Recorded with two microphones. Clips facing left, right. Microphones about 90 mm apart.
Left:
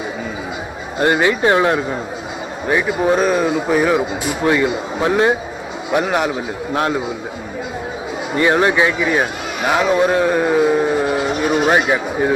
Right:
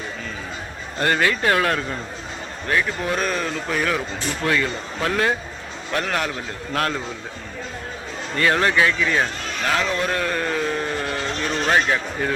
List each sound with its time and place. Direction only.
0.9 s a man's voice: 15° left (ahead or behind)
8.3 s a man's voice: 15° left (ahead or behind)